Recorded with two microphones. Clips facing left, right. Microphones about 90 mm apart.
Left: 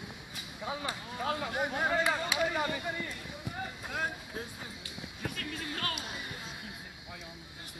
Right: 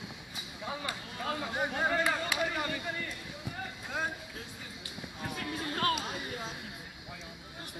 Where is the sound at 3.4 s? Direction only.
5° left (ahead or behind).